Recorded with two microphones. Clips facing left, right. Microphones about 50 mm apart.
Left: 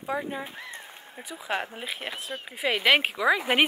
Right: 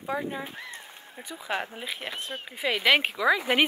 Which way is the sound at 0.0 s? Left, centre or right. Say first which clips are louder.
Even; centre.